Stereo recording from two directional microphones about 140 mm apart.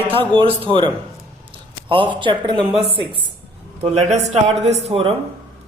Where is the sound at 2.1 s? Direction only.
35° right (ahead or behind).